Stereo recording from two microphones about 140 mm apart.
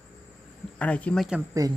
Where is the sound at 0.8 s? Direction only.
10° left (ahead or behind).